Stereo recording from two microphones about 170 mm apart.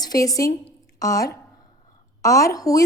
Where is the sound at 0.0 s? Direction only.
20° left (ahead or behind).